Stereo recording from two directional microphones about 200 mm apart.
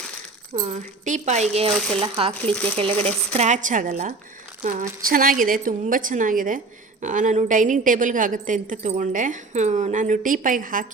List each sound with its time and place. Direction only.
0.6 s a woman's voice: 35° right (ahead or behind)
2.5 s speech: 5° left (ahead or behind)
2.7 s a woman's voice: 30° right (ahead or behind)